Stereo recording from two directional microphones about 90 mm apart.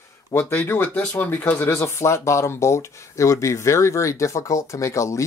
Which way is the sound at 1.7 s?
30° left (ahead or behind).